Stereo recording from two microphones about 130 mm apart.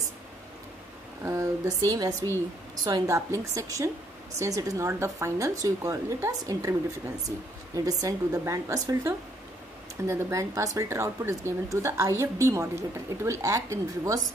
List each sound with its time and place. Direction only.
1.2 s speech: 20° right (ahead or behind)